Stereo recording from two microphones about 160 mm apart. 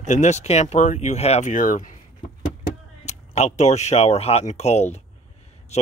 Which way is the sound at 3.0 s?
45° left (ahead or behind).